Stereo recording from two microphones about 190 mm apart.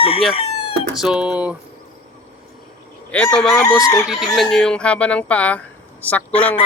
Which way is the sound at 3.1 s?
5° left (ahead or behind).